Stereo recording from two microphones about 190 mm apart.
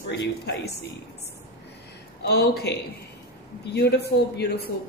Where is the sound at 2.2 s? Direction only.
55° left (ahead or behind).